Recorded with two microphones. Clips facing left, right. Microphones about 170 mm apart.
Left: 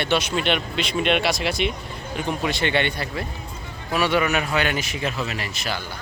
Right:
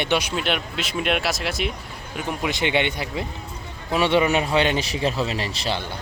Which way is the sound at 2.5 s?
15° right (ahead or behind).